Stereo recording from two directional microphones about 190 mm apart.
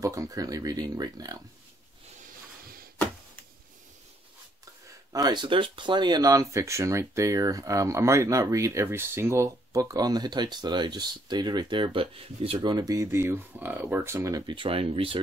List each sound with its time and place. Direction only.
0.0 s speech: 20° right (ahead or behind)
5.1 s speech: 20° right (ahead or behind)